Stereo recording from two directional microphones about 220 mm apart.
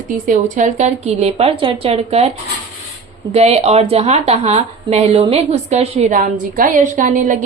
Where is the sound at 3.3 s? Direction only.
30° right (ahead or behind).